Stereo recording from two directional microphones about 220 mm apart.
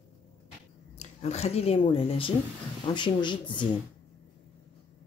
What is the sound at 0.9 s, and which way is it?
Speech, 30° left (ahead or behind).